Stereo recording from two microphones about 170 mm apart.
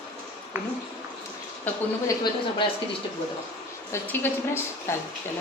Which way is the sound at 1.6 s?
20° left (ahead or behind).